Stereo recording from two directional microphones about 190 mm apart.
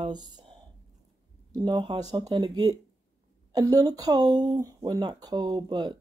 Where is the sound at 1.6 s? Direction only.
25° right (ahead or behind).